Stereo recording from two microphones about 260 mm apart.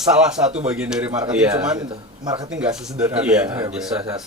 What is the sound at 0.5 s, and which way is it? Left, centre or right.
Speech, centre.